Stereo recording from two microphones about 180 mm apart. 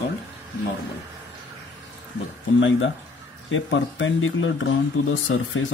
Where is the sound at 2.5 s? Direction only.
90° left.